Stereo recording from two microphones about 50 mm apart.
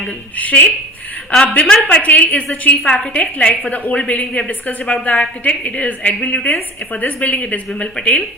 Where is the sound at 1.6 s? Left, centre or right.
Centre.